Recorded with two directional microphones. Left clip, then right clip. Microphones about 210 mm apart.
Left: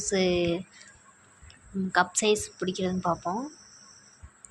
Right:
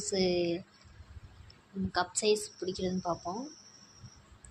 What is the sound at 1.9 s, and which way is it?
A woman's voice, 20° left (ahead or behind).